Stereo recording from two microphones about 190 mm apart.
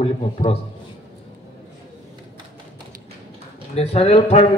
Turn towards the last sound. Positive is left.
turn(degrees=35)  # may be behind; listen again after turning